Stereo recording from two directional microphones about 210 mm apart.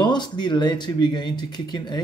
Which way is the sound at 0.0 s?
20° left (ahead or behind).